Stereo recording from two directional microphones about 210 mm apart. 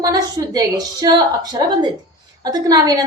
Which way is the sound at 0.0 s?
15° right (ahead or behind).